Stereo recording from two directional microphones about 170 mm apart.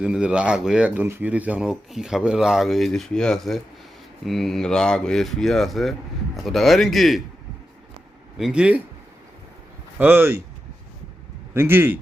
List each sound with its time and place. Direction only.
0.0 s speech: 5° right (ahead or behind)
8.4 s speech: 5° right (ahead or behind)
10.0 s speech: 10° right (ahead or behind)
11.5 s speech: 10° right (ahead or behind)